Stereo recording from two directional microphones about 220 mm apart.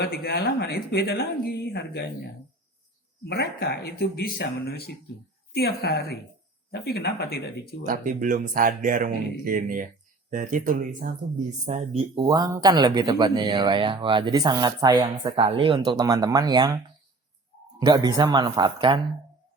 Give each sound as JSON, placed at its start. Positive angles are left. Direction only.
{"t": 0.0, "sound": "speech", "side_deg": 45}
{"t": 3.2, "sound": "speech", "side_deg": 50}
{"t": 7.9, "sound": "speech", "side_deg": -35}
{"t": 17.7, "sound": "speech", "side_deg": -20}